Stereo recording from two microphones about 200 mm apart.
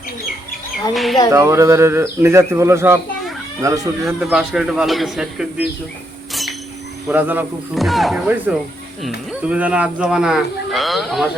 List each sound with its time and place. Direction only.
0.9 s speech: centre (ahead or behind)
1.3 s speech: 15° right (ahead or behind)
4.0 s speech: 5° right (ahead or behind)
7.1 s speech: 10° right (ahead or behind)